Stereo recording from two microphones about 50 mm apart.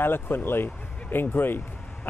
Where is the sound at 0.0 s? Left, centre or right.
Left.